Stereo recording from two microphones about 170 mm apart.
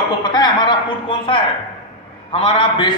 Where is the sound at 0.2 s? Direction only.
25° left (ahead or behind).